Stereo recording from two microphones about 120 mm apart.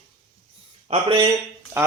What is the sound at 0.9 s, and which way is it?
Speech, 45° right (ahead or behind).